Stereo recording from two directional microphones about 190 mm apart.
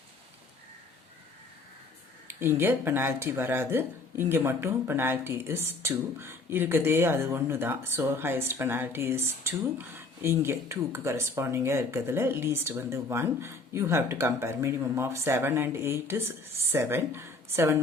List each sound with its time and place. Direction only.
2.2 s speech: 15° right (ahead or behind)